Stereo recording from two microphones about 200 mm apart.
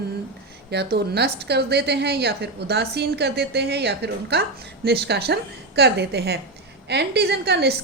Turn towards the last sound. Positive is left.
turn(degrees=-55)  # may be behind; listen again after turning